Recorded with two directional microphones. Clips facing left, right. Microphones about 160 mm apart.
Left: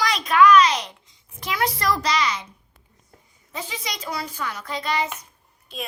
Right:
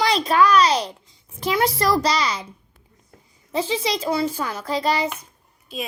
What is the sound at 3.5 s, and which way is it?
A child's voice, 30° right (ahead or behind).